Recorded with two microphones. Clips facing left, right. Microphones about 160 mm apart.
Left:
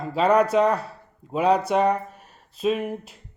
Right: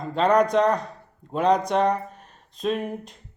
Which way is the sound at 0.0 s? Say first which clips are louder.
Even; 5° left (ahead or behind).